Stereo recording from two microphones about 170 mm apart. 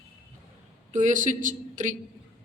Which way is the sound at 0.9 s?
45° right (ahead or behind).